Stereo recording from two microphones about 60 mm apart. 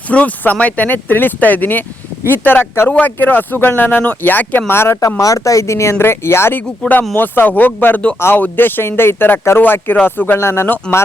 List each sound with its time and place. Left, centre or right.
0.1 s speech: left
2.9 s speech: left
4.7 s speech: left
4.9 s speech: left
6.6 s speech: left
10.4 s speech: left